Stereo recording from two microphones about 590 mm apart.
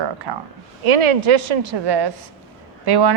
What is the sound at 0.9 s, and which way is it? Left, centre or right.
A woman's voice, right.